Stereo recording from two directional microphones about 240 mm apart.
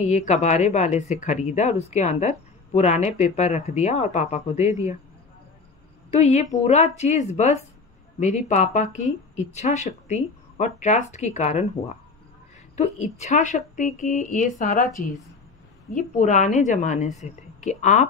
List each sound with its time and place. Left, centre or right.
0.1 s speech: left
6.0 s speech: left
12.7 s a woman's voice: left
15.9 s a woman's voice: left